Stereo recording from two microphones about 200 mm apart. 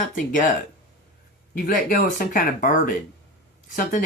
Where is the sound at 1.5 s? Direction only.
45° left (ahead or behind).